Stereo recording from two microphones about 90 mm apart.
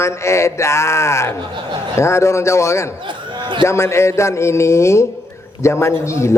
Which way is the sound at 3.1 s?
60° right (ahead or behind).